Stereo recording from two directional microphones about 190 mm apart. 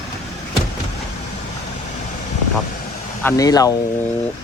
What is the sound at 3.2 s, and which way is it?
Speech, 15° left (ahead or behind).